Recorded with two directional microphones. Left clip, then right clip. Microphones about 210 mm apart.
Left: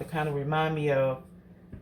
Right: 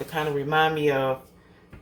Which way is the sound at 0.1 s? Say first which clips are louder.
Right 5 dB; 15° right (ahead or behind).